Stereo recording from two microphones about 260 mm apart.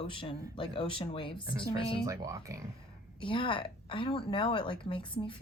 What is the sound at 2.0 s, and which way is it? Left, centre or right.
Speech, centre.